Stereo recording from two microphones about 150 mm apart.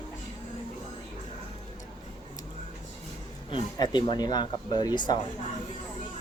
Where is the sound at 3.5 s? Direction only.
30° left (ahead or behind).